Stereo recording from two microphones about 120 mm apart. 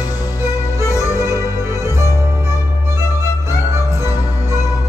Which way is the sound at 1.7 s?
25° left (ahead or behind).